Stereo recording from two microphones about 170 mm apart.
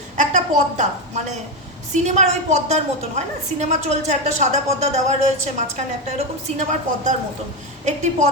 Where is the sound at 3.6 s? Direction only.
45° right (ahead or behind).